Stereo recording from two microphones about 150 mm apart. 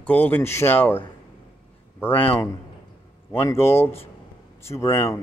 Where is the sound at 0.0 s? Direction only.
10° left (ahead or behind).